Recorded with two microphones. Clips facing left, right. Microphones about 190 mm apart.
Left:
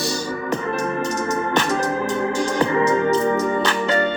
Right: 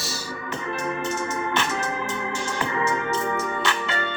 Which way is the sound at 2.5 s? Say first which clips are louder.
Left 7 dB; 35° left (ahead or behind).